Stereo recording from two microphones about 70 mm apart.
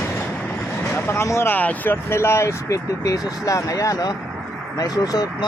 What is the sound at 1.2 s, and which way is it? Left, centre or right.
Speech, left.